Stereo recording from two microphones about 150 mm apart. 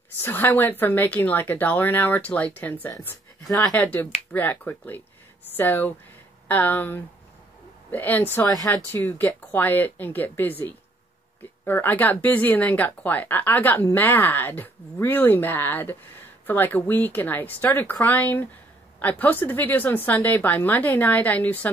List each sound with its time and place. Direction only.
0.2 s speech: 15° left (ahead or behind)